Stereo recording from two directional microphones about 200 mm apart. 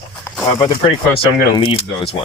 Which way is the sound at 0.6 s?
20° left (ahead or behind).